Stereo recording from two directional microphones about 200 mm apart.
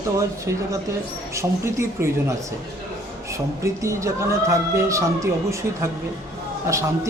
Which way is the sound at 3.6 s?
15° right (ahead or behind).